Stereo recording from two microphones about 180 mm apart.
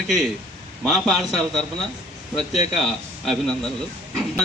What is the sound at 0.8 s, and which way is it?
Speech, centre (ahead or behind).